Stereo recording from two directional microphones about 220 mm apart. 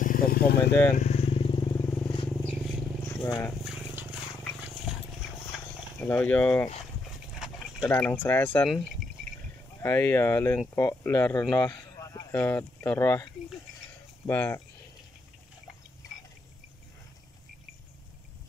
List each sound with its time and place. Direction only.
0.0 s vehicle: 40° left (ahead or behind)
0.9 s vehicle: 30° left (ahead or behind)
2.2 s vehicle: 5° left (ahead or behind)
3.2 s speech: 20° left (ahead or behind)
3.4 s a sound: 5° right (ahead or behind)
4.6 s wild animals: 5° right (ahead or behind)
5.9 s speech: 10° left (ahead or behind)
7.8 s speech: 10° left (ahead or behind)
9.8 s speech: 10° left (ahead or behind)